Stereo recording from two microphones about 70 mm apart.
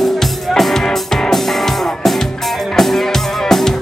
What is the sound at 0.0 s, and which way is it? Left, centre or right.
Music, centre.